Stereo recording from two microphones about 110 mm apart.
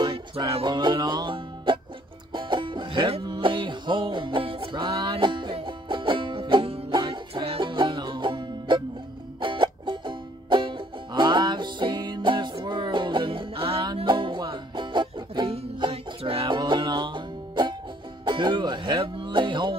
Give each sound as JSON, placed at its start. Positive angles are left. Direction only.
{"t": 0.7, "sound": "music", "side_deg": -40}
{"t": 14.0, "sound": "music", "side_deg": -45}
{"t": 16.1, "sound": "music", "side_deg": -60}
{"t": 16.4, "sound": "music", "side_deg": -45}